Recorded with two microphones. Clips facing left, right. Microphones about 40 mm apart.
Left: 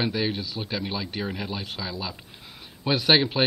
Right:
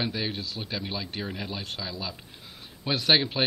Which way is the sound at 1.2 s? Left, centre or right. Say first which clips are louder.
Left 3 dB; left.